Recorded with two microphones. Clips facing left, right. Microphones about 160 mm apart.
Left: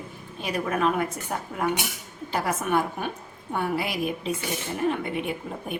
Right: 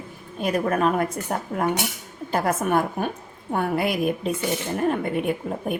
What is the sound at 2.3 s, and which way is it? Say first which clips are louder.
A woman's voice: right 3 dB; 50° right (ahead or behind).